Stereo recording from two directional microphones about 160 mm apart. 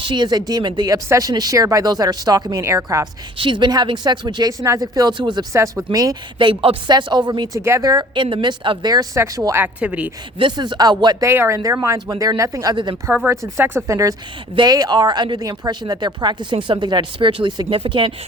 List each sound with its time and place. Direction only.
0.0 s speech: 30° right (ahead or behind)
3.3 s speech: 30° right (ahead or behind)
6.5 s speech: 35° right (ahead or behind); by 10.1 s 10° right (ahead or behind)
10.3 s speech: 30° right (ahead or behind)
13.1 s speech: 15° right (ahead or behind); by 18.1 s 30° right (ahead or behind)